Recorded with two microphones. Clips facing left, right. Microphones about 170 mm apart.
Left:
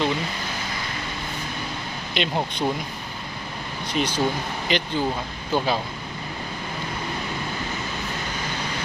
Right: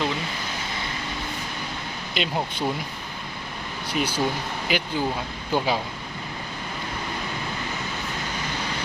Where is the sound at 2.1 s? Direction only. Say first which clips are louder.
Left 2 dB; 5° right (ahead or behind).